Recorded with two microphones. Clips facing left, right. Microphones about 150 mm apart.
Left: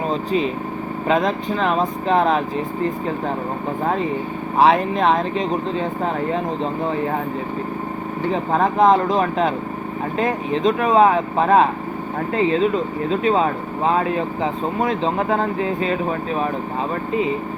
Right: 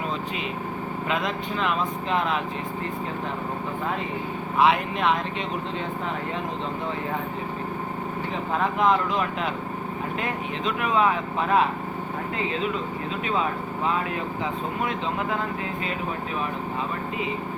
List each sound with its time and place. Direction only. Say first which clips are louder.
0.1 s vehicle: left 10 dB; 35° left (ahead or behind)
1.0 s speech: left 9 dB; 35° left (ahead or behind)
4.5 s speech: left 6 dB; 35° left (ahead or behind)
8.3 s speech: left 8 dB; 40° left (ahead or behind)